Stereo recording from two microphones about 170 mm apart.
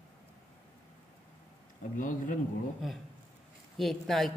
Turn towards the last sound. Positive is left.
turn(degrees=0)  # may be behind; listen again after turning